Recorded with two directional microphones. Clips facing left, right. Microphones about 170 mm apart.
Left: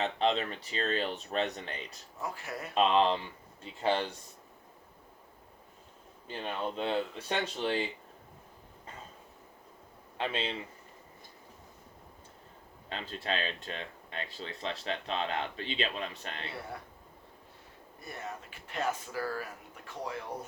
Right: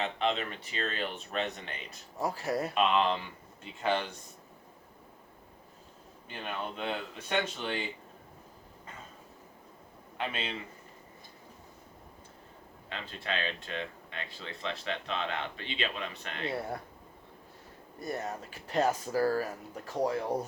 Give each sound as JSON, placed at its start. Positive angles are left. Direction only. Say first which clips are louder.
{"t": 0.0, "sound": "speech", "louder": "left 2 dB", "side_deg": 35}
{"t": 2.1, "sound": "speech", "louder": "right 8 dB", "side_deg": -35}
{"t": 2.7, "sound": "speech", "louder": "left 4 dB", "side_deg": 30}
{"t": 6.2, "sound": "speech", "louder": "left 2 dB", "side_deg": 30}
{"t": 10.2, "sound": "speech", "louder": "left 2 dB", "side_deg": 30}
{"t": 12.9, "sound": "speech", "louder": "left 2 dB", "side_deg": 35}
{"t": 18.0, "sound": "speech", "louder": "right 6 dB", "side_deg": -40}